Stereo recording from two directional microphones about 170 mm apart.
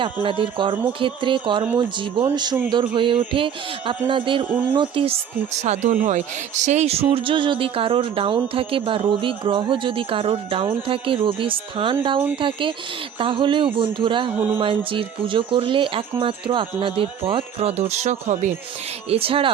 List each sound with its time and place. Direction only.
0.0 s a man's voice: 30° right (ahead or behind)
4.4 s speech: 10° right (ahead or behind)
4.7 s a man's voice: 30° right (ahead or behind)
14.3 s speech: 10° right (ahead or behind)
14.6 s speech: 30° right (ahead or behind)